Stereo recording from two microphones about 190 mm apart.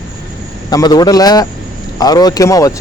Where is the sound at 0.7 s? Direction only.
20° left (ahead or behind).